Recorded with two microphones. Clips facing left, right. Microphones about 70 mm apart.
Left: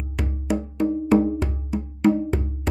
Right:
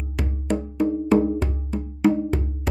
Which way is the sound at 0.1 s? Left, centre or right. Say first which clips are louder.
Even; centre.